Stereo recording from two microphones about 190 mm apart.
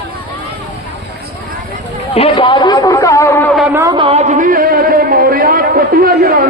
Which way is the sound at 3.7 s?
20° right (ahead or behind).